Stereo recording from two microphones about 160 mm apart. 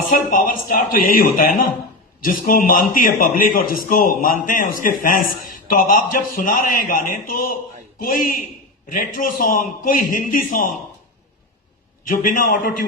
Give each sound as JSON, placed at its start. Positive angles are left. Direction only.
{"t": 0.1, "sound": "a man's voice", "side_deg": 60}
{"t": 12.0, "sound": "a man's voice", "side_deg": 60}